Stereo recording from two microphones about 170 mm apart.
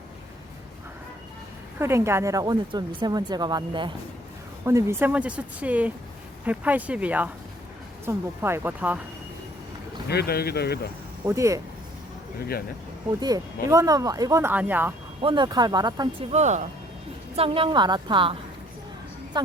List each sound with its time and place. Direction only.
1.8 s speech: 15° right (ahead or behind)
4.6 s speech: 15° right (ahead or behind)
10.1 s speech: 70° left (ahead or behind)
11.3 s speech: 15° right (ahead or behind)
13.1 s speech: 20° right (ahead or behind)
15.2 s speech: 30° right (ahead or behind)
16.3 s speech: 45° right (ahead or behind)
17.3 s speech: 35° right (ahead or behind)